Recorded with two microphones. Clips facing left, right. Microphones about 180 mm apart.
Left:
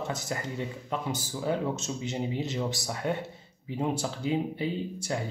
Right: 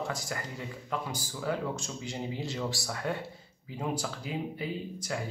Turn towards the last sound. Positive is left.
turn(degrees=25)  # may be behind; listen again after turning